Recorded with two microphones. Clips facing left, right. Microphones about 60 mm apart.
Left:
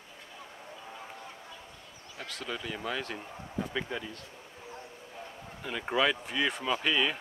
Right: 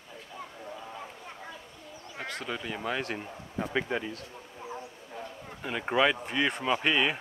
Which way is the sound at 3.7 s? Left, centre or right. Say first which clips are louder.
Right 8 dB; right.